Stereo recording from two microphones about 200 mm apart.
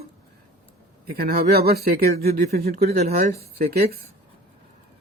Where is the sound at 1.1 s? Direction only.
50° right (ahead or behind).